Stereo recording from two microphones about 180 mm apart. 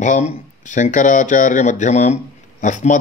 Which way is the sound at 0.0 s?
45° left (ahead or behind).